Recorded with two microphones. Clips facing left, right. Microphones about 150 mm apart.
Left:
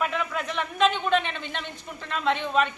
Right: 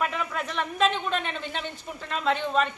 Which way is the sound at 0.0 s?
Centre (ahead or behind).